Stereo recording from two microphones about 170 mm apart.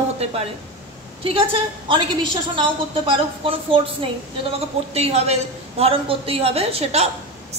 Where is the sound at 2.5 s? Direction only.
30° right (ahead or behind).